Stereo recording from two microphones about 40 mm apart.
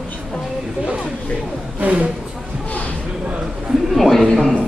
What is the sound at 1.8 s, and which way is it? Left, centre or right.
Speech, right.